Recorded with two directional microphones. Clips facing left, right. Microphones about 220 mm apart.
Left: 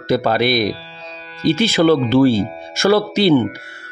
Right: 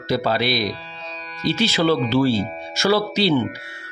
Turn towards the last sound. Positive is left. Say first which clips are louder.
# left 5 dB
turn(degrees=50)  # may be behind; listen again after turning